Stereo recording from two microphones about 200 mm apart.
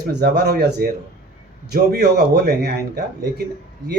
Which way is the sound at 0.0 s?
55° right (ahead or behind).